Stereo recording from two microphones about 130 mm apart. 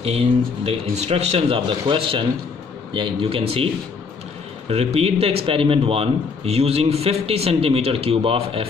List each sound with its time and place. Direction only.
0.0 s a man's voice: 55° right (ahead or behind)
4.6 s a man's voice: 55° right (ahead or behind)